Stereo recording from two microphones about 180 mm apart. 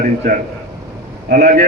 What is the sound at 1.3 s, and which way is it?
Speech, 45° right (ahead or behind).